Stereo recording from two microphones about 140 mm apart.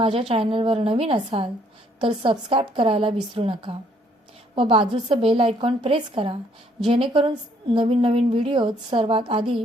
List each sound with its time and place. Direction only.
0.0 s a woman's voice: 40° right (ahead or behind)
2.0 s a woman's voice: 35° right (ahead or behind)